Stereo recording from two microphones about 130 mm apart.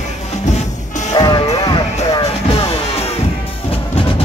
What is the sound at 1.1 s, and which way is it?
Music, 30° left (ahead or behind).